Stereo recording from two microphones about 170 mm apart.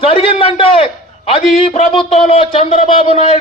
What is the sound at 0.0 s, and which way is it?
A man's voice, 35° left (ahead or behind).